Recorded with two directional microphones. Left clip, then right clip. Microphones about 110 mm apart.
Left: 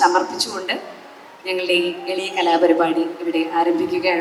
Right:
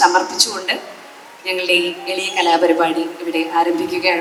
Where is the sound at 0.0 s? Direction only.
25° left (ahead or behind).